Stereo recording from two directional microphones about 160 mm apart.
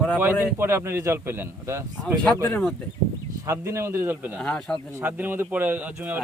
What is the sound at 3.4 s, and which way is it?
Speech, 15° right (ahead or behind).